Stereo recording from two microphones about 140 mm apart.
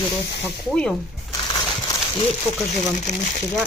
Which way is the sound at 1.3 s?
35° left (ahead or behind).